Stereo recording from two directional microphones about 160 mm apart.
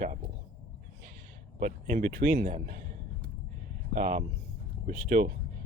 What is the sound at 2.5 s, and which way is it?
Speech, 50° right (ahead or behind).